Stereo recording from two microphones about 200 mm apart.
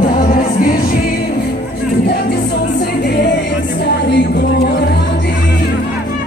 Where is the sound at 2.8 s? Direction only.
55° left (ahead or behind).